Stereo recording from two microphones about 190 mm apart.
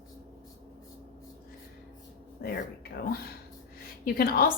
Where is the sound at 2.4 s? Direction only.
55° left (ahead or behind).